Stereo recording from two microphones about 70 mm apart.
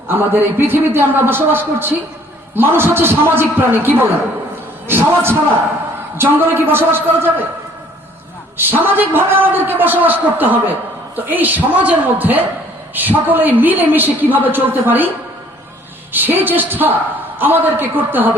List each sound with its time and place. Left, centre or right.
0.1 s a man's voice: right
8.5 s a man's voice: right
16.1 s a man's voice: right